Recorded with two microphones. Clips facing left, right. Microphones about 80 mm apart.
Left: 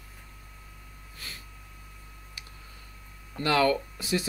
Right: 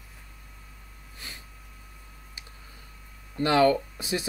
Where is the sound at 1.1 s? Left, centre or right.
Right.